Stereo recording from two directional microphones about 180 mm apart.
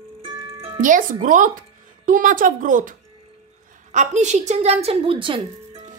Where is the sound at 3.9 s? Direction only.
40° right (ahead or behind).